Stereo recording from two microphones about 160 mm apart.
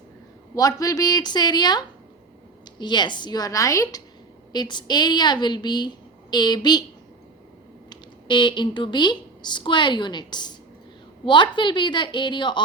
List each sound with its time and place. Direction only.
0.5 s a woman's voice: 20° left (ahead or behind)
7.9 s a woman's voice: 30° left (ahead or behind)